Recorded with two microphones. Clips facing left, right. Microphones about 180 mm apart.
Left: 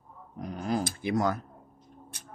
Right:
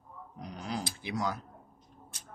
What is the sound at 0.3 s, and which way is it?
Dog, 50° left (ahead or behind).